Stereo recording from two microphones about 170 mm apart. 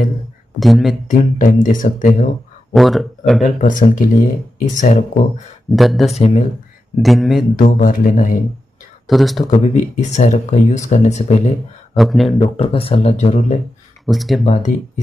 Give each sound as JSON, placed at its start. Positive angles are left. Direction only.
{"t": 0.6, "sound": "a man's voice", "side_deg": 0}
{"t": 1.0, "sound": "speech", "side_deg": 50}
{"t": 2.7, "sound": "a man's voice", "side_deg": 0}
{"t": 3.4, "sound": "speech", "side_deg": 50}
{"t": 5.7, "sound": "a man's voice", "side_deg": 0}
{"t": 6.1, "sound": "speech", "side_deg": 40}
{"t": 7.0, "sound": "a man's voice", "side_deg": 0}
{"t": 7.5, "sound": "speech", "side_deg": 55}
{"t": 9.0, "sound": "a man's voice", "side_deg": 0}
{"t": 9.5, "sound": "speech", "side_deg": 45}
{"t": 11.9, "sound": "a man's voice", "side_deg": 0}
{"t": 12.4, "sound": "speech", "side_deg": 35}
{"t": 14.0, "sound": "a man's voice", "side_deg": 0}
{"t": 14.4, "sound": "speech", "side_deg": 45}